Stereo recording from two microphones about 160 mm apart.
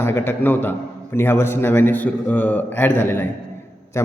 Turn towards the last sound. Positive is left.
turn(degrees=20)  # may be behind; listen again after turning